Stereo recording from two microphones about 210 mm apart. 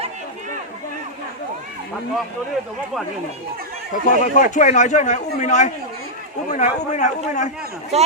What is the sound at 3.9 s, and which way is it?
A man's voice, 40° left (ahead or behind).